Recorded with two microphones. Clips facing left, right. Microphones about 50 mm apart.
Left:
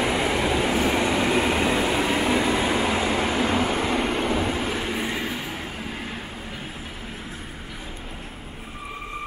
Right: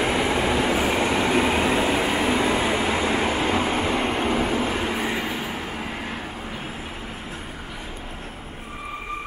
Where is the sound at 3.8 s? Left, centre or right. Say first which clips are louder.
Right 1 dB; centre.